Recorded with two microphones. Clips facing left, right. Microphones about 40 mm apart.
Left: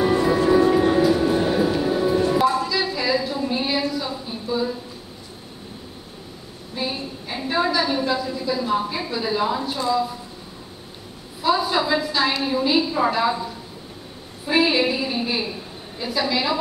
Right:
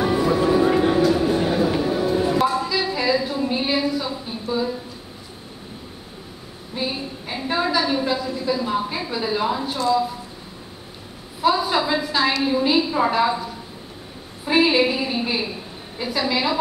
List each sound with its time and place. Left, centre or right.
0.0 s music: centre
0.7 s train: centre
0.9 s train: centre
1.8 s music: centre
2.9 s a sound: centre
6.8 s a sound: centre
7.5 s a sound: centre
8.9 s a woman's voice: centre
11.5 s a woman's voice: centre
14.5 s a woman's voice: centre